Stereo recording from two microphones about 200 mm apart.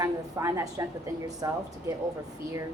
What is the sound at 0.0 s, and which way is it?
A woman's voice, 15° right (ahead or behind).